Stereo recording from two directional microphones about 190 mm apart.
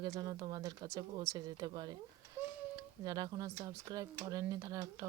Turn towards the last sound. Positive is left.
turn(degrees=-20)  # may be behind; listen again after turning